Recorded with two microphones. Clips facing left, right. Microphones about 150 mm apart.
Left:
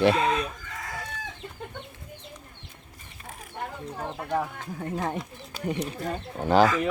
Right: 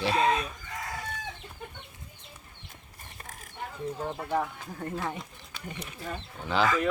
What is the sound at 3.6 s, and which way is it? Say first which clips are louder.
Chicken: left 4 dB; 65° left (ahead or behind).